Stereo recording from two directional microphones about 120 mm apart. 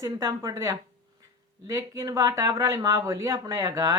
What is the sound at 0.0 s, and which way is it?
Speech, 30° right (ahead or behind).